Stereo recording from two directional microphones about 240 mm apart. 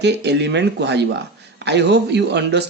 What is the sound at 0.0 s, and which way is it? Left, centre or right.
Speech, right.